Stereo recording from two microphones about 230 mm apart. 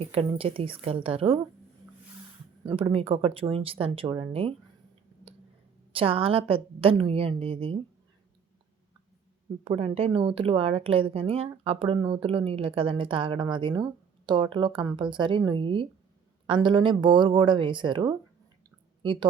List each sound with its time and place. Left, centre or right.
0.0 s speech: right
2.6 s speech: right
5.9 s speech: right
9.6 s speech: right